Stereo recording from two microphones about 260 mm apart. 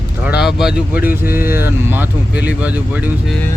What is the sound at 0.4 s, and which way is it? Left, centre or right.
Speech, centre.